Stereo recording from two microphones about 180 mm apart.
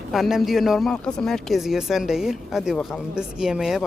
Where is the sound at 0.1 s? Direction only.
Centre (ahead or behind).